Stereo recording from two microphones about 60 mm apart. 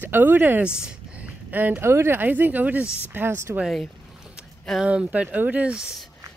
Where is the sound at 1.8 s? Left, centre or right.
Right.